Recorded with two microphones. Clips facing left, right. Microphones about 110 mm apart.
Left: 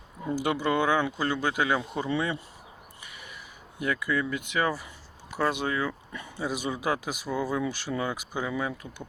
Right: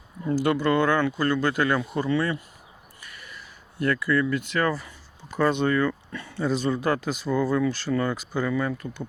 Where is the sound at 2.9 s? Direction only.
20° left (ahead or behind).